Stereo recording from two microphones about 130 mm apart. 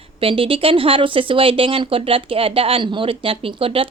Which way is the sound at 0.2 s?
45° right (ahead or behind).